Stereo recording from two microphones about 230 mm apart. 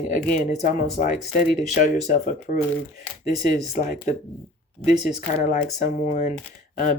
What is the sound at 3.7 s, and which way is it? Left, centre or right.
Speech, left.